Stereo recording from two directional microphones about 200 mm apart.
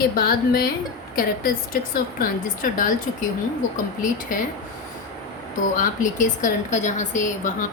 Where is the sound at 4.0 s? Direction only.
40° left (ahead or behind).